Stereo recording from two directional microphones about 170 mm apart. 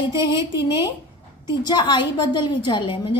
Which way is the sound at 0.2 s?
25° left (ahead or behind).